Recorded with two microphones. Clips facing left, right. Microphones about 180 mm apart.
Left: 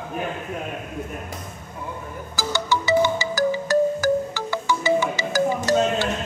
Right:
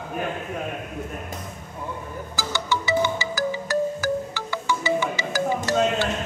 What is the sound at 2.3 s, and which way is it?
Music, 40° left (ahead or behind).